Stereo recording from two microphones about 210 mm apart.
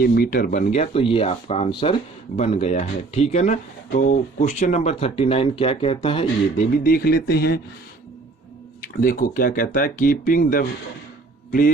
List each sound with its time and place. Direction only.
0.0 s speech: 45° left (ahead or behind); by 6.7 s 25° left (ahead or behind)
6.8 s speech: 45° left (ahead or behind)
9.0 s speech: 40° left (ahead or behind)